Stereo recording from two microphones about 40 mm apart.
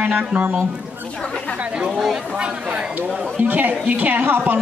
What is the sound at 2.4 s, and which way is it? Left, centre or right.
Speech, right.